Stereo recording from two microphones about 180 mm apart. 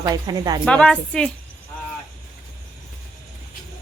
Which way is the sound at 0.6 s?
5° left (ahead or behind).